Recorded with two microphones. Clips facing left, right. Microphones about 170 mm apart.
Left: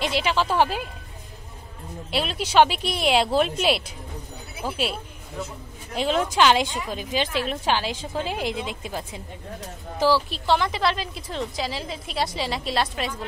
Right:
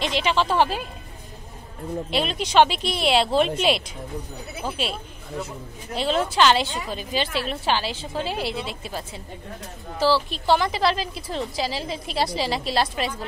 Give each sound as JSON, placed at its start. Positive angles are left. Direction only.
{"t": 0.0, "sound": "a woman's voice", "side_deg": 10}
{"t": 2.0, "sound": "a woman's voice", "side_deg": 5}
{"t": 5.9, "sound": "a woman's voice", "side_deg": 10}
{"t": 10.3, "sound": "a woman's voice", "side_deg": -5}